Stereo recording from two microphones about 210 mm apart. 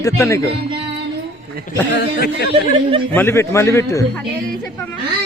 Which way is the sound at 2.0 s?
50° left (ahead or behind).